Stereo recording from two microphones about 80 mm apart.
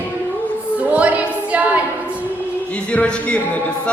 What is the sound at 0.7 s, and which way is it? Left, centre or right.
Music, centre.